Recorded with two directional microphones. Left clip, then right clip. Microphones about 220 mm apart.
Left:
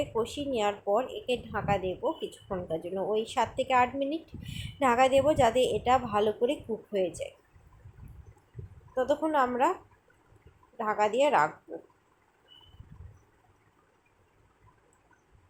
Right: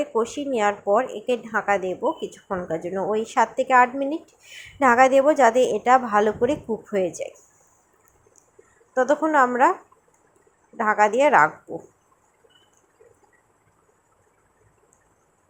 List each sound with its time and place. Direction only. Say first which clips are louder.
0.0 s a woman's voice: right 7 dB; 20° right (ahead or behind)
9.0 s a woman's voice: right 8 dB; 20° right (ahead or behind)
10.8 s a woman's voice: right 8 dB; 20° right (ahead or behind)